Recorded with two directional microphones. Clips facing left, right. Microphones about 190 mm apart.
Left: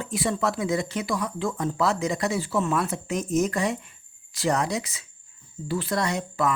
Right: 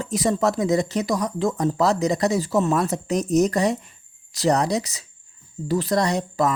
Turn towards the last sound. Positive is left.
turn(degrees=-35)  # may be behind; listen again after turning